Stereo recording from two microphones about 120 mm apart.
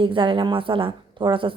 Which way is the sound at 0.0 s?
45° right (ahead or behind).